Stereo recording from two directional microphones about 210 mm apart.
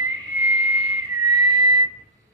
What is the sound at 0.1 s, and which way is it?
Whistle, 20° right (ahead or behind).